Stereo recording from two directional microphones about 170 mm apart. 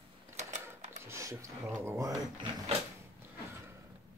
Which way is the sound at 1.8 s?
20° right (ahead or behind).